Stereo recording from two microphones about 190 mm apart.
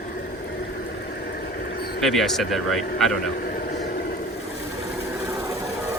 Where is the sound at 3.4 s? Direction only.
55° left (ahead or behind).